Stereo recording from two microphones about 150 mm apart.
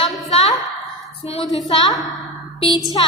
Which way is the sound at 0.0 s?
40° left (ahead or behind).